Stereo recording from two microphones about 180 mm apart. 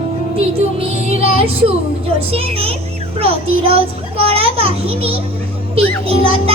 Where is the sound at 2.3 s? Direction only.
35° right (ahead or behind).